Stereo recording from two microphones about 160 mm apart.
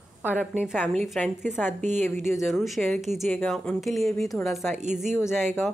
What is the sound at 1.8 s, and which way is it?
Speech, 45° right (ahead or behind).